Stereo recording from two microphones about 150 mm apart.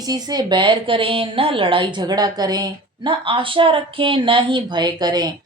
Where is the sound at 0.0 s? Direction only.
25° right (ahead or behind).